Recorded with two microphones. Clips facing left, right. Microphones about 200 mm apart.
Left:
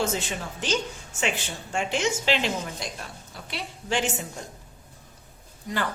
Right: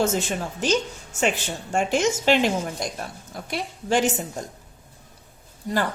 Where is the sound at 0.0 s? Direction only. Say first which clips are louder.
Right 5 dB; 45° right (ahead or behind).